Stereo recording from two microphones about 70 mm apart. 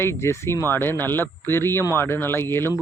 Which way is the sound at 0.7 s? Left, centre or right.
Left.